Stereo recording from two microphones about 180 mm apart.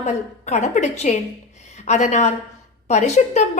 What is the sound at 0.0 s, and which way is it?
A woman's voice, 40° left (ahead or behind).